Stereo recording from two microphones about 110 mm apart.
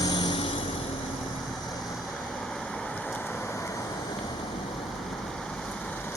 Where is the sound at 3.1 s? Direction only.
15° left (ahead or behind).